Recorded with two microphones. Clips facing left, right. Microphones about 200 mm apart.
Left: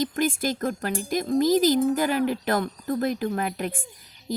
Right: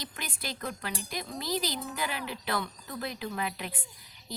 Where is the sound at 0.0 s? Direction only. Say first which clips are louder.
Left 16 dB; 45° left (ahead or behind).